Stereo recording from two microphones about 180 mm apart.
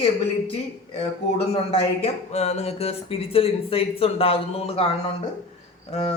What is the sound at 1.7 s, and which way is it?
Speech, 35° left (ahead or behind).